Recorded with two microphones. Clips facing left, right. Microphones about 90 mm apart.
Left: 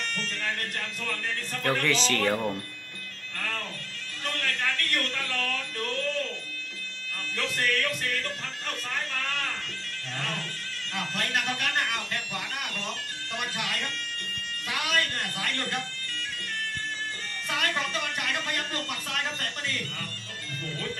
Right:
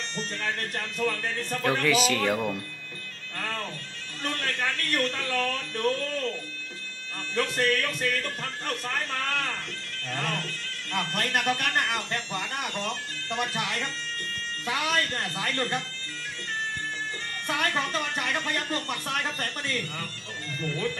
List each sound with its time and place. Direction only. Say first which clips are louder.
0.1 s speech: right 1 dB; 30° right (ahead or behind)
1.6 s speech: right 2 dB; 5° right (ahead or behind)
3.3 s music: right 1 dB; 25° right (ahead or behind)
4.2 s speech: right 1 dB; 30° right (ahead or behind)
7.3 s speech: right 4 dB; 30° right (ahead or behind)
10.9 s speech: right 3 dB; 45° right (ahead or behind)
17.5 s speech: right 2 dB; 35° right (ahead or behind)